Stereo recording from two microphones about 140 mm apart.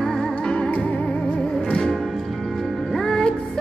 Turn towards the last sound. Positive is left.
turn(degrees=5)  # may be behind; listen again after turning